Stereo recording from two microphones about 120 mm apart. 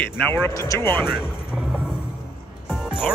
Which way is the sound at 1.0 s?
5° right (ahead or behind).